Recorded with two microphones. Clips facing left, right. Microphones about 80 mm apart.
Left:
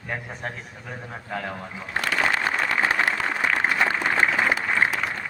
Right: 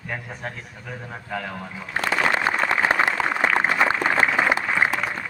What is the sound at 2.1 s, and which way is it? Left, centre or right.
Applause, right.